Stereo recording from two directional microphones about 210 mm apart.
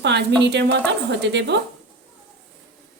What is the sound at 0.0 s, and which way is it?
A woman's voice, 55° right (ahead or behind).